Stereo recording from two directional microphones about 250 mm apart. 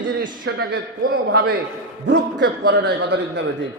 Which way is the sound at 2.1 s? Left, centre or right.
Right.